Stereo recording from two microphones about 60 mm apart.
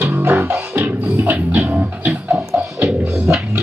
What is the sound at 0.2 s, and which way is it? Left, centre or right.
Music, right.